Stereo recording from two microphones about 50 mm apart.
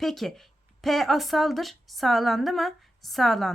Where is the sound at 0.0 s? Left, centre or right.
Centre.